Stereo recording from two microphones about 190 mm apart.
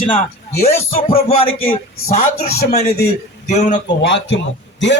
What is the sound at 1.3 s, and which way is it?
A man's voice, 30° left (ahead or behind).